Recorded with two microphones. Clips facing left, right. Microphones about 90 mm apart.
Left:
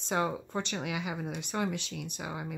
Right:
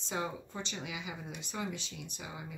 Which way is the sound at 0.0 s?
60° left (ahead or behind).